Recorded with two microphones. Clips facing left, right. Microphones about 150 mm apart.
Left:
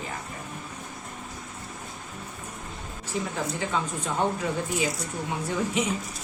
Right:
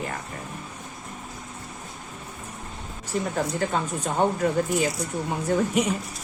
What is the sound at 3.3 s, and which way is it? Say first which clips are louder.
Speech: right 3 dB; 45° right (ahead or behind).